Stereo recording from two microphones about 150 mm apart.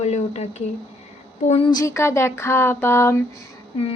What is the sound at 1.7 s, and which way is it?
A woman's voice, 20° left (ahead or behind).